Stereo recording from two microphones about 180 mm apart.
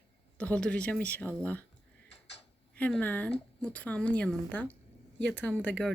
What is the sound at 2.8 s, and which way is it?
Speech, 10° left (ahead or behind).